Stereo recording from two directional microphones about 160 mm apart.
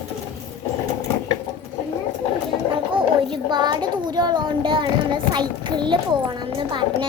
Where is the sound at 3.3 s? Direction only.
30° right (ahead or behind).